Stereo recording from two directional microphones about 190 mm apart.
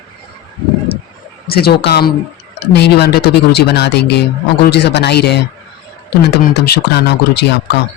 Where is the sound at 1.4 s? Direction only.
55° left (ahead or behind).